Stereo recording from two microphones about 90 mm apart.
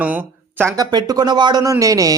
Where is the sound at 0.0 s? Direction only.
20° right (ahead or behind).